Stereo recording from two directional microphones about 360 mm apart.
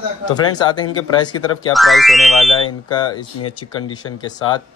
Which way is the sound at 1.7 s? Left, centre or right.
Centre.